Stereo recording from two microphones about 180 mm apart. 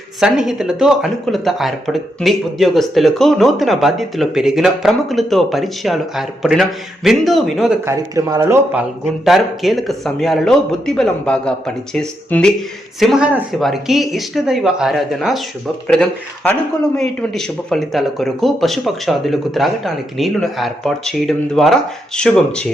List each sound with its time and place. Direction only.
0.2 s speech: centre (ahead or behind)
7.9 s a man's voice: 20° right (ahead or behind)
9.0 s speech: centre (ahead or behind)